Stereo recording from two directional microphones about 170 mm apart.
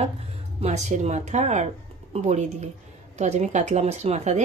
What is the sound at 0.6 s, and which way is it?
A woman's voice, 40° right (ahead or behind).